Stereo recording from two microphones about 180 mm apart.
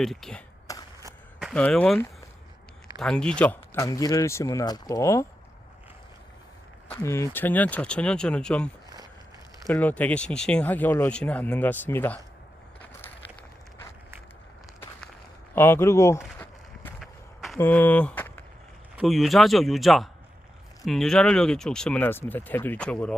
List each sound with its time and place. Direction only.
0.0 s speech: centre (ahead or behind)
0.7 s a sound: 20° left (ahead or behind)
1.4 s a sound: 5° right (ahead or behind)
1.6 s speech: 5° left (ahead or behind)
7.0 s speech: 15° left (ahead or behind)
15.5 s walk: 15° left (ahead or behind)
17.0 s walk: centre (ahead or behind)
17.6 s speech: 10° left (ahead or behind)
18.9 s speech: centre (ahead or behind)